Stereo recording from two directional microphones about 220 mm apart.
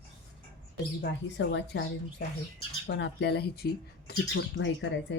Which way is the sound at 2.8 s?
55° left (ahead or behind).